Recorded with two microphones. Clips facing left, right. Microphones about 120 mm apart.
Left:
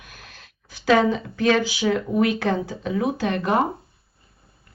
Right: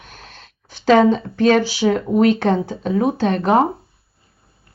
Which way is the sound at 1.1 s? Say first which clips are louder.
Right 3 dB; 60° right (ahead or behind).